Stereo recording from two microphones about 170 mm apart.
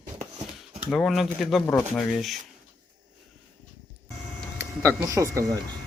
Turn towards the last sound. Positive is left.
turn(degrees=-20)  # may be behind; listen again after turning